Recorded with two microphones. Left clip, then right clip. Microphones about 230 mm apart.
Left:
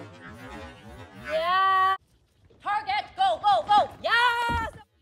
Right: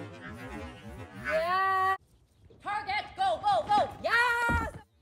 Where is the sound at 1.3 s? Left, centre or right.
Centre.